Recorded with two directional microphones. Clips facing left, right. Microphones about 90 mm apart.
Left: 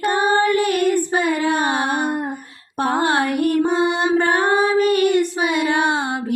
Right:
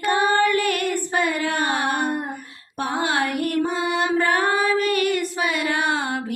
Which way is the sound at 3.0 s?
35° left (ahead or behind).